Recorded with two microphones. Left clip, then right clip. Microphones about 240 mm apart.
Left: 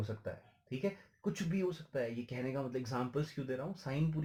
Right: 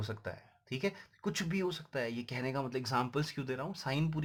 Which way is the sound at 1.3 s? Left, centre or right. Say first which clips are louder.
Right 3 dB; right.